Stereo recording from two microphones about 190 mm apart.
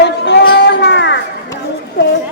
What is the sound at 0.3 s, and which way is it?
Children playing, 65° left (ahead or behind).